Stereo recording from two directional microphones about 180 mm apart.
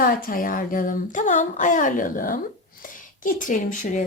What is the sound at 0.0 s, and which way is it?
Speech, 50° left (ahead or behind).